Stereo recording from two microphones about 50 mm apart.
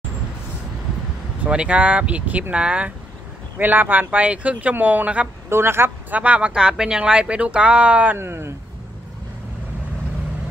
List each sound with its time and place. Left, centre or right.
1.5 s speech: right
3.5 s speech: right
5.5 s speech: right
6.0 s speech: right
8.2 s speech: right